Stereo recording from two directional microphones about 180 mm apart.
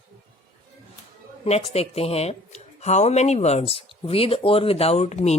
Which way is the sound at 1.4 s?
35° left (ahead or behind).